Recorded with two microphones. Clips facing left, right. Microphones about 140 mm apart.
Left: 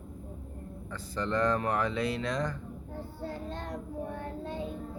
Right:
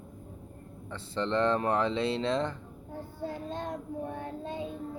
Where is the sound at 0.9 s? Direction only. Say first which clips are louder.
Right 2 dB; 25° right (ahead or behind).